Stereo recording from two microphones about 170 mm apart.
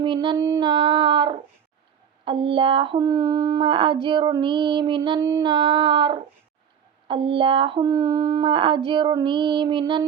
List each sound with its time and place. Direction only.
0.0 s a sound: 30° right (ahead or behind)
0.4 s female singing: 15° right (ahead or behind)
0.7 s female singing: 25° right (ahead or behind)